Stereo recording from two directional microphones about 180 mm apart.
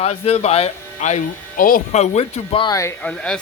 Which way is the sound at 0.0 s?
35° left (ahead or behind).